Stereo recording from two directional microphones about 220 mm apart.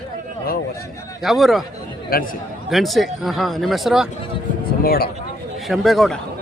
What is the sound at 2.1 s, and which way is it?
Speech, 40° left (ahead or behind).